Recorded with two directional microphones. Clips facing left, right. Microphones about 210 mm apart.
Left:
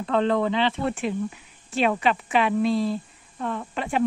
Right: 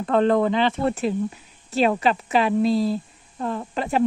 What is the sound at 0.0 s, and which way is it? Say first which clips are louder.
Speech: right 3 dB; 45° right (ahead or behind).